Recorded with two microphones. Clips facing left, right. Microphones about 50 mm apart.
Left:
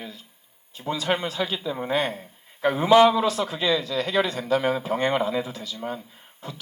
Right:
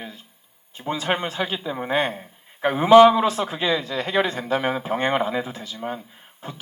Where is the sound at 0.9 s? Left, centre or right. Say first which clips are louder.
Right 1 dB; right.